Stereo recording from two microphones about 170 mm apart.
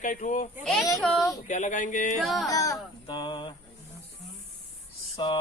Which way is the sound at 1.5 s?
45° left (ahead or behind).